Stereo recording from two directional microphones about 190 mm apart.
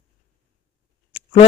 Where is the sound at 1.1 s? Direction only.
30° left (ahead or behind).